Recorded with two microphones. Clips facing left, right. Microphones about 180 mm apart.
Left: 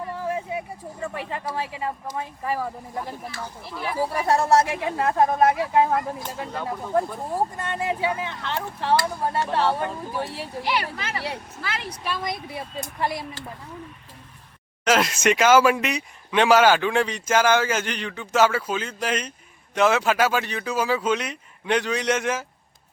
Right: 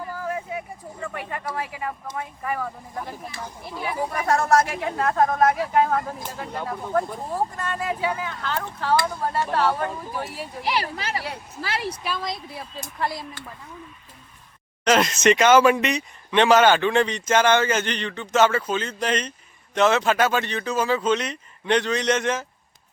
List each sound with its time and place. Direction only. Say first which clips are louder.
0.0 s a sound: left 1 dB; 25° left (ahead or behind)
1.0 s speech: left 1 dB; 25° left (ahead or behind)
3.7 s speech: right 1 dB; 15° right (ahead or behind)
4.1 s speech: even; 30° left (ahead or behind)
6.0 s speech: left 1 dB; centre (ahead or behind)
7.3 s speech: left 1 dB; 25° left (ahead or behind)
10.7 s speech: right 2 dB; 35° right (ahead or behind)
11.8 s speech: right 1 dB; 5° right (ahead or behind)
12.5 s speech: left 3 dB; 25° left (ahead or behind)
14.8 s speech: right 2 dB; 5° left (ahead or behind)